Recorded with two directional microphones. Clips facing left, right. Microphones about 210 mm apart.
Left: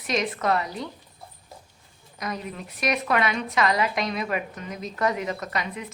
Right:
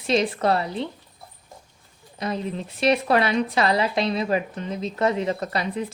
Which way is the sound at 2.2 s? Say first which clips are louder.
Right 5 dB; 30° right (ahead or behind).